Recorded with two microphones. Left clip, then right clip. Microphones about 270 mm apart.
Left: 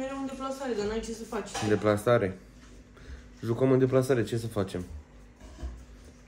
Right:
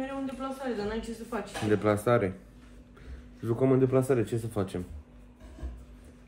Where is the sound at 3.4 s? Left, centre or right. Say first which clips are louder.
Left 1 dB; centre.